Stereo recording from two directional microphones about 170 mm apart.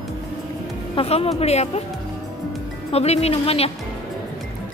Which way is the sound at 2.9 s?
35° left (ahead or behind).